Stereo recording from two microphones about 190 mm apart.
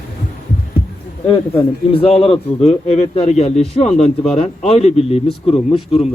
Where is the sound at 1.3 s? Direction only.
30° left (ahead or behind).